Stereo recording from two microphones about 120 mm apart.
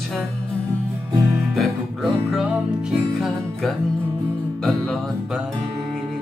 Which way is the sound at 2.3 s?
5° right (ahead or behind).